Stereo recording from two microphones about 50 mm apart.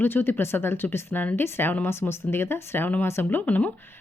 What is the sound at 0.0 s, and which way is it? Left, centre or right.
Speech, left.